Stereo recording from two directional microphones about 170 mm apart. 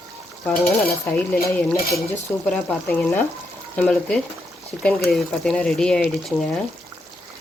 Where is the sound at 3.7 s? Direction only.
5° left (ahead or behind).